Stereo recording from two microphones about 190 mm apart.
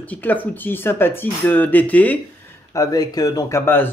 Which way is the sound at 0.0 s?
10° left (ahead or behind).